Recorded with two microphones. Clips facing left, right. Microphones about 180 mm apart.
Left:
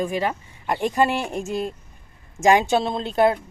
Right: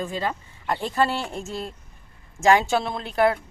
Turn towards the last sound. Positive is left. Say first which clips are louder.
# left 2 dB
turn(degrees=20)  # may be behind; listen again after turning